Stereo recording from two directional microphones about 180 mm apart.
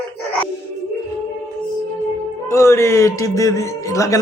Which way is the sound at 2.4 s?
15° left (ahead or behind).